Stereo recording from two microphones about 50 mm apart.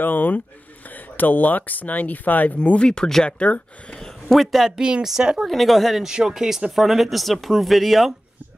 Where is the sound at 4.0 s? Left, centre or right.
Centre.